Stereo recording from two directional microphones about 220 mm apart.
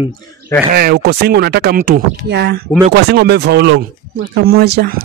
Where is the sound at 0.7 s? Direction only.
45° right (ahead or behind).